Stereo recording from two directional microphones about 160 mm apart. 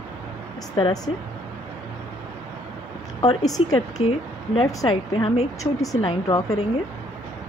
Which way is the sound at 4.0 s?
35° left (ahead or behind).